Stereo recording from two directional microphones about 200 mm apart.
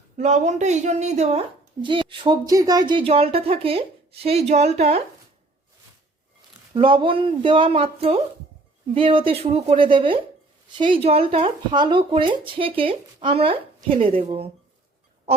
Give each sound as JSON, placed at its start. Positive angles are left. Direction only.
{"t": 0.2, "sound": "speech", "side_deg": -35}
{"t": 6.7, "sound": "speech", "side_deg": -25}